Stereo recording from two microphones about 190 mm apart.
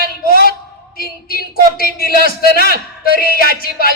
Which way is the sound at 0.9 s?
50° left (ahead or behind).